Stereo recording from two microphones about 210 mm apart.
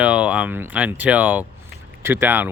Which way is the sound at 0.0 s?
5° right (ahead or behind).